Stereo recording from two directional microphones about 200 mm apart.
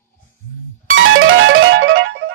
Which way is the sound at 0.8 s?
80° right.